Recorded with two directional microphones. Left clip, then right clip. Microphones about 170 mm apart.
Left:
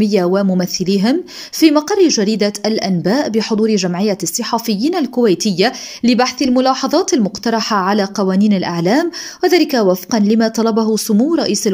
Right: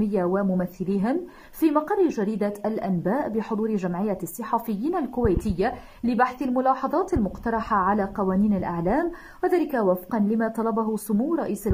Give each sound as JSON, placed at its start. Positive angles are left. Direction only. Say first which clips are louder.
{"t": 0.1, "sound": "a woman's voice", "louder": "left 10 dB", "side_deg": 25}
{"t": 2.6, "sound": "a woman's voice", "louder": "left 10 dB", "side_deg": 30}